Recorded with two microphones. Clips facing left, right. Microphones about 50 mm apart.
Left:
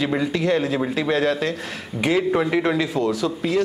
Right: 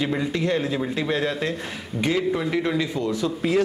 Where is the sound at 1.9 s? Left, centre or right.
Centre.